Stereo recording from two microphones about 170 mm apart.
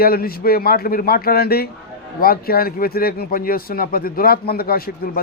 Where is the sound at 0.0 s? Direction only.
60° left (ahead or behind).